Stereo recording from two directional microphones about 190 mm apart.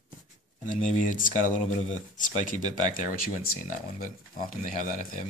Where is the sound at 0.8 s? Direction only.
40° left (ahead or behind).